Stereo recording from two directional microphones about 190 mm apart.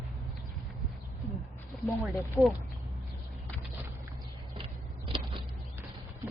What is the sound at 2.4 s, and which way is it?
Speech, 5° right (ahead or behind).